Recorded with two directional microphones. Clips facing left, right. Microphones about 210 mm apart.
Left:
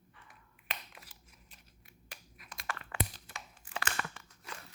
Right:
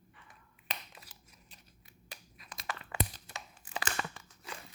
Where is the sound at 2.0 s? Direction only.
25° right (ahead or behind).